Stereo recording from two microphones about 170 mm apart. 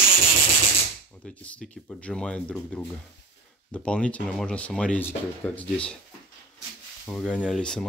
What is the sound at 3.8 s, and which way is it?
Speech, 5° left (ahead or behind).